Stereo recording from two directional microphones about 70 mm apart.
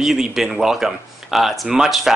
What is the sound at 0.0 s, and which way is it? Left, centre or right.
Speech, centre.